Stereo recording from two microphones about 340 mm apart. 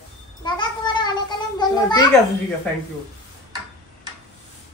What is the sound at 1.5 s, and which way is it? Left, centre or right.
Children playing, centre.